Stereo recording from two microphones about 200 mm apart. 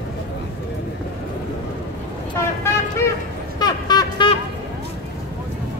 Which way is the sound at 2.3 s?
10° left (ahead or behind).